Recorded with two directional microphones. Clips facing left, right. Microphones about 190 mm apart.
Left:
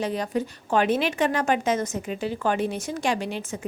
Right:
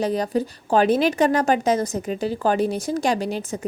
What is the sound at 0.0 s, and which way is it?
A woman's voice, 40° right (ahead or behind).